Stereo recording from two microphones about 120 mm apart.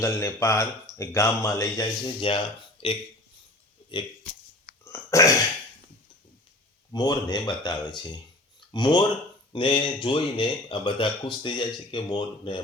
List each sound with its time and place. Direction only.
0.0 s speech: 25° left (ahead or behind)
2.0 s speech: 45° left (ahead or behind)
4.9 s burping: 25° left (ahead or behind)
6.9 s speech: 35° left (ahead or behind)